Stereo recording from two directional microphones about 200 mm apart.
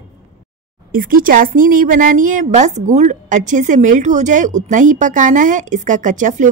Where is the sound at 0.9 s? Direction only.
45° right (ahead or behind).